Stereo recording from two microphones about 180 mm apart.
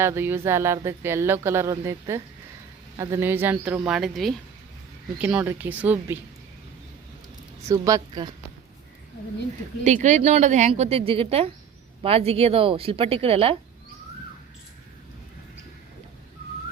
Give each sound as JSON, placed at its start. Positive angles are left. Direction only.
{"t": 0.0, "sound": "speech", "side_deg": -15}
{"t": 5.2, "sound": "speech", "side_deg": -10}
{"t": 7.7, "sound": "a woman's voice", "side_deg": -20}
{"t": 9.8, "sound": "a woman's voice", "side_deg": -40}